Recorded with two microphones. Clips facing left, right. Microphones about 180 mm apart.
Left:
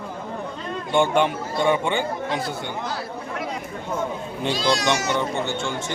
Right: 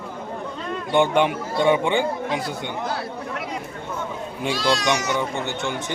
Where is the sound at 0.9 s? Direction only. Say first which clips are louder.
Right 1 dB; 15° right (ahead or behind).